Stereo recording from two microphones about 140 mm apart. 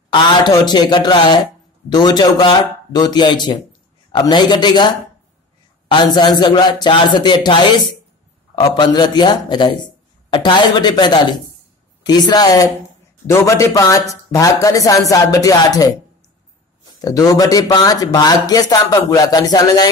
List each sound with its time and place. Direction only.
0.1 s speech: 30° left (ahead or behind)
17.0 s speech: 25° left (ahead or behind)